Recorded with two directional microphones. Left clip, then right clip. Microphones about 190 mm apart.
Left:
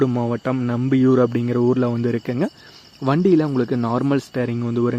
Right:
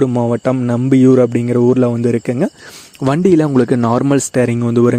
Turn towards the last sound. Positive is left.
turn(degrees=-45)  # may be behind; listen again after turning